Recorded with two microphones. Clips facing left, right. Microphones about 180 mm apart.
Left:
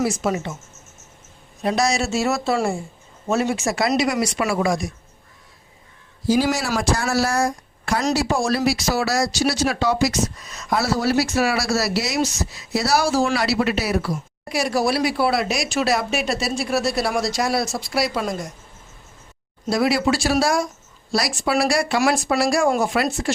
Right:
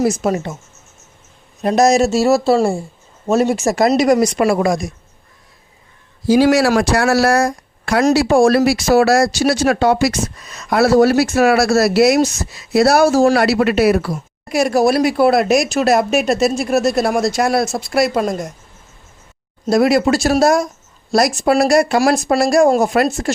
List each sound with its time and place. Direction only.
0.0 s speech: 45° right (ahead or behind)
1.6 s speech: 45° right (ahead or behind)
6.2 s speech: 65° right (ahead or behind); by 18.4 s 50° right (ahead or behind)
19.6 s speech: 45° right (ahead or behind)